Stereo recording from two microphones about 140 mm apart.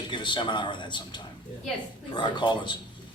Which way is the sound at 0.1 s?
35° left (ahead or behind).